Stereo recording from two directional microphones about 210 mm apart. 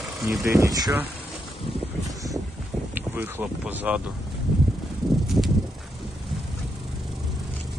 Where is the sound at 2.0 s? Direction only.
15° right (ahead or behind).